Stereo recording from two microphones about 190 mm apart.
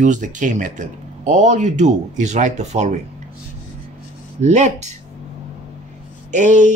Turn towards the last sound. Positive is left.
turn(degrees=-40)  # may be behind; listen again after turning